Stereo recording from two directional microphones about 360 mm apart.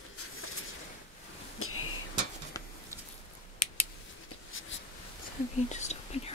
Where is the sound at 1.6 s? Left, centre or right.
Left.